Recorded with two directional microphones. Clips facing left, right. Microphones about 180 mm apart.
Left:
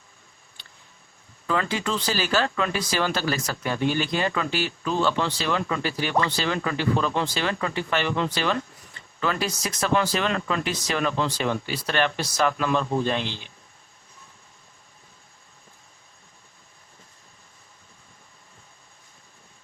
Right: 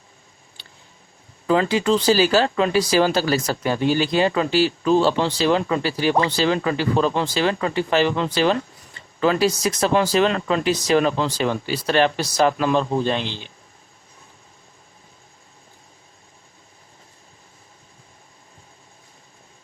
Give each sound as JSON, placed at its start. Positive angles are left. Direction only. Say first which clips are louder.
{"t": 1.5, "sound": "speech", "louder": "right 8 dB", "side_deg": -30}